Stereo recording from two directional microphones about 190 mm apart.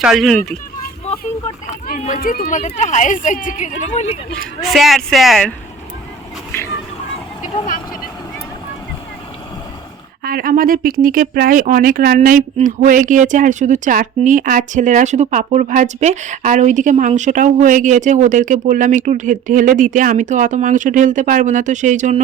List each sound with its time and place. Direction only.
0.0 s a man's voice: centre (ahead or behind)
1.9 s speech: 40° left (ahead or behind)
4.6 s a man's voice: centre (ahead or behind)
10.2 s speech: 50° right (ahead or behind)